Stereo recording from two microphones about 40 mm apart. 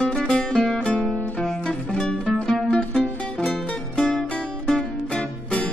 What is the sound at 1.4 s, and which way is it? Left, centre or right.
Music, centre.